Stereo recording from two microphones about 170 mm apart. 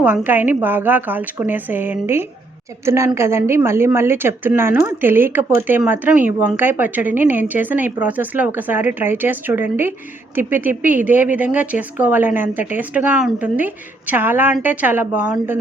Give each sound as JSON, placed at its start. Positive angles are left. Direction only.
{"t": 0.0, "sound": "a woman's voice", "side_deg": -10}